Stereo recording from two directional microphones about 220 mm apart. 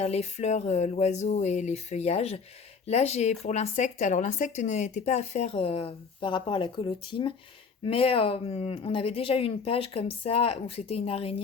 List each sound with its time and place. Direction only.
0.0 s speech: 30° left (ahead or behind)